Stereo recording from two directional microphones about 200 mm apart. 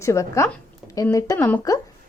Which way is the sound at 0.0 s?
15° left (ahead or behind).